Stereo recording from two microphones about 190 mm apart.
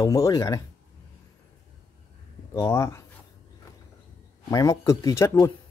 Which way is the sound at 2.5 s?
15° left (ahead or behind).